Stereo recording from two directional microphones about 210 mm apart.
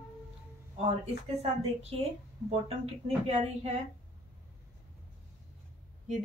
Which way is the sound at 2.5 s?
30° right (ahead or behind).